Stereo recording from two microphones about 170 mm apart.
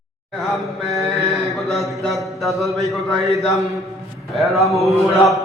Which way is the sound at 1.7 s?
Centre (ahead or behind).